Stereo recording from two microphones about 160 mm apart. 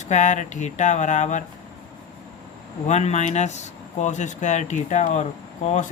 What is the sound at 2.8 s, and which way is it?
Speech, 45° left (ahead or behind).